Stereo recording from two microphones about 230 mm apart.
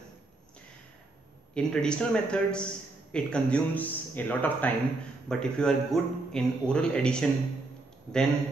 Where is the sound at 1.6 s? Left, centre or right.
Centre.